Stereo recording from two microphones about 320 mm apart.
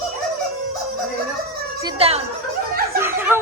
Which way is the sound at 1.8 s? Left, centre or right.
Centre.